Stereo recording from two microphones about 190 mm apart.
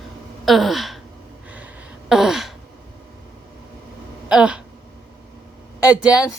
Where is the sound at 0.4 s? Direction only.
Centre (ahead or behind).